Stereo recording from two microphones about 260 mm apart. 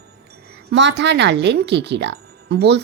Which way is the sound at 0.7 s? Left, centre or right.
Right.